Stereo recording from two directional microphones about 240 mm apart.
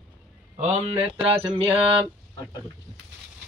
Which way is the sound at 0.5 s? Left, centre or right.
Right.